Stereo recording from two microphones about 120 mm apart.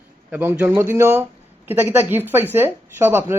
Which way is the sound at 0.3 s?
10° right (ahead or behind).